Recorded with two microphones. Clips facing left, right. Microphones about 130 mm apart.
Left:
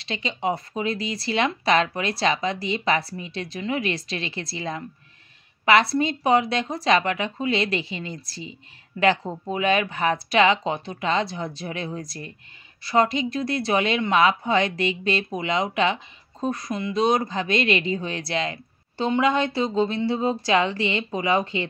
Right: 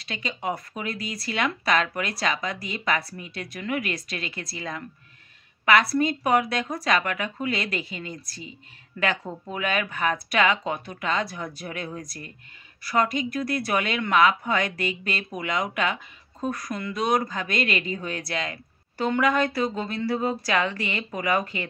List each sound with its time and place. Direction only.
0.0 s a woman's voice: 30° left (ahead or behind)